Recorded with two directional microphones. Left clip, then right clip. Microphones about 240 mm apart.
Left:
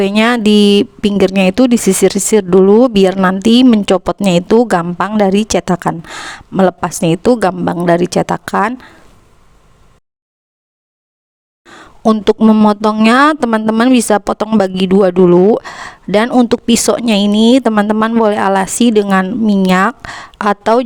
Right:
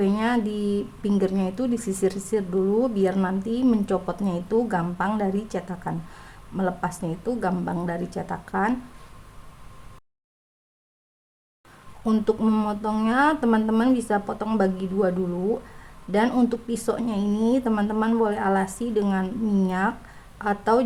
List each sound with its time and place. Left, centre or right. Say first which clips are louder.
0.0 s a woman's voice: left 13 dB; left
12.0 s a woman's voice: left 13 dB; left